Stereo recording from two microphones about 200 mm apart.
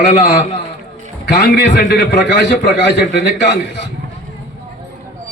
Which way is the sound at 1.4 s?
50° left (ahead or behind).